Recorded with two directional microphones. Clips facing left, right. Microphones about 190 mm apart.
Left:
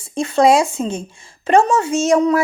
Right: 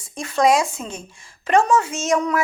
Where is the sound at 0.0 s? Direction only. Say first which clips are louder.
Left 5 dB; 30° left (ahead or behind).